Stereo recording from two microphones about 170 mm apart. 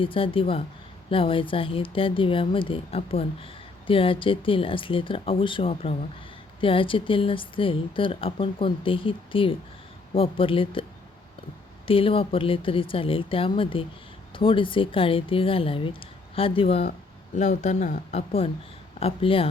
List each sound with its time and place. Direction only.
0.0 s speech: 30° left (ahead or behind)
11.9 s speech: 30° left (ahead or behind)